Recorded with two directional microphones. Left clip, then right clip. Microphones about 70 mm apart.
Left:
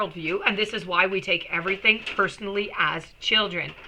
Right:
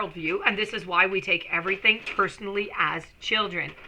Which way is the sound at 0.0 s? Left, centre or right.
Right.